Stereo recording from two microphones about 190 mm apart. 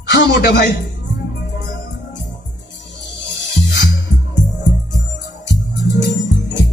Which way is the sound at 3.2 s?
70° left (ahead or behind).